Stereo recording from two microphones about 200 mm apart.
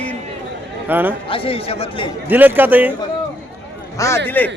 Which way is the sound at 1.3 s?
30° left (ahead or behind).